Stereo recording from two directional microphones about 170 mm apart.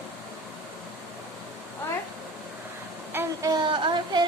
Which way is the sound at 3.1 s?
15° right (ahead or behind).